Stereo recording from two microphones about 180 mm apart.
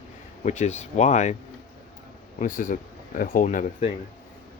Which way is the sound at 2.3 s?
45° left (ahead or behind).